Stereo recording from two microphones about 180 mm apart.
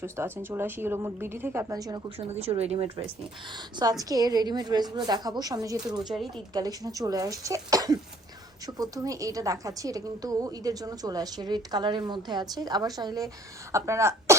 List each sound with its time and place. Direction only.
0.0 s a woman's voice: 15° right (ahead or behind)
2.1 s speech: 35° right (ahead or behind)
3.8 s a woman's voice: 20° right (ahead or behind)